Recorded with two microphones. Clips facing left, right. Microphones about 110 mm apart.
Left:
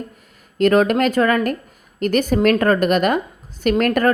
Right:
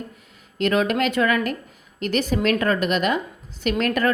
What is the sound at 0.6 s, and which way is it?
A woman's voice, 45° left (ahead or behind).